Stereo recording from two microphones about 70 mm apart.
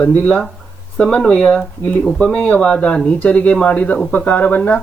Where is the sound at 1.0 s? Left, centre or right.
Centre.